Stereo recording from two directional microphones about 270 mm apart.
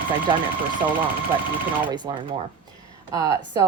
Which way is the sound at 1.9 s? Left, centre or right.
Centre.